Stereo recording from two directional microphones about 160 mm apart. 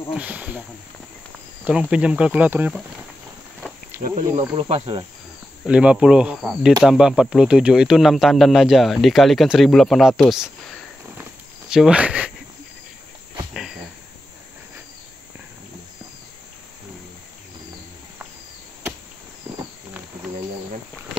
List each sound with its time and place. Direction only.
0.1 s speech: 10° right (ahead or behind)
1.6 s speech: 10° right (ahead or behind)
4.1 s speech: 35° right (ahead or behind)
5.7 s speech: 5° right (ahead or behind)